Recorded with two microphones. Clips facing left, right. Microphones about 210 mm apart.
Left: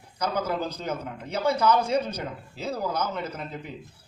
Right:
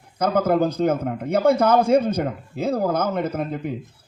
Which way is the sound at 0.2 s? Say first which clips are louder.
Right 9 dB; 55° right (ahead or behind).